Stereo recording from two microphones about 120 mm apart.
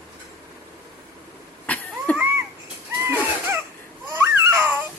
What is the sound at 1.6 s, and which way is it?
Cough, 10° left (ahead or behind).